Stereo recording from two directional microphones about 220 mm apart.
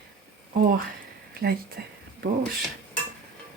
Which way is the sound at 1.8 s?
45° right (ahead or behind).